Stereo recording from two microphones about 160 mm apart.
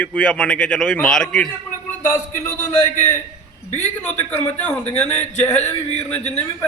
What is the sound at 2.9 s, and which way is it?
Speech, 50° left (ahead or behind).